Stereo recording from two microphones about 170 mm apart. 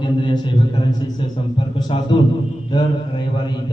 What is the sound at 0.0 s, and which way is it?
A man's voice, 30° left (ahead or behind).